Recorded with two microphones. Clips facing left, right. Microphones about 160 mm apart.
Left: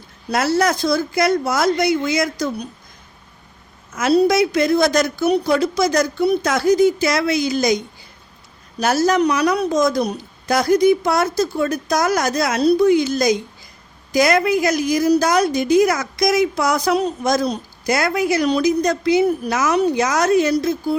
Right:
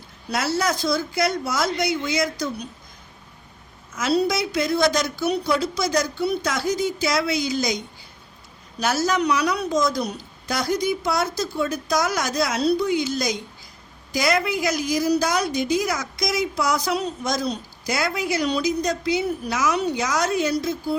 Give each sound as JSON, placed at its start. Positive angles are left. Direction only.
{"t": 0.3, "sound": "a woman's voice", "side_deg": 50}
{"t": 3.9, "sound": "a woman's voice", "side_deg": 50}
{"t": 8.8, "sound": "a woman's voice", "side_deg": 50}